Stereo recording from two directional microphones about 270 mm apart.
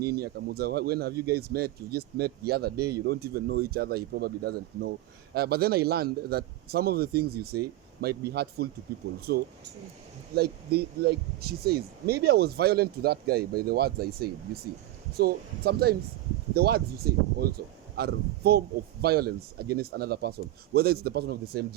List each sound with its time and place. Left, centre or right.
0.0 s speech: right
10.3 s speech: right